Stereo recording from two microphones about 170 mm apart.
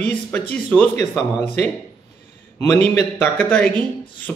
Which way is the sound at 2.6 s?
10° left (ahead or behind).